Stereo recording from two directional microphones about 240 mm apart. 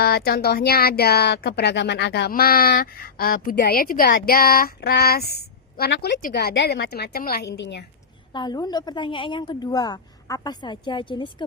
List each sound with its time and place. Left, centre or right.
0.0 s speech: left
8.3 s a woman's voice: centre